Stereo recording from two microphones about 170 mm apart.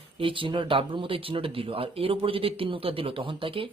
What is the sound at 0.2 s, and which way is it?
Speech, 30° right (ahead or behind).